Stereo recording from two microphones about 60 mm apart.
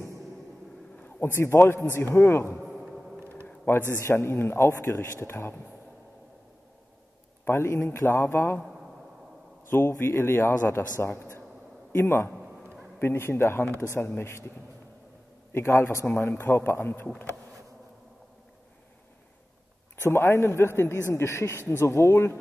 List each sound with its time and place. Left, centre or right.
1.0 s a man's voice: left
2.6 s a sound: centre
3.7 s a man's voice: left
7.4 s a man's voice: left
9.7 s a man's voice: left
15.5 s a man's voice: left
20.1 s speech: left